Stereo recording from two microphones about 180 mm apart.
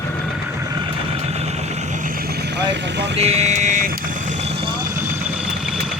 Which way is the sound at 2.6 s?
75° right (ahead or behind).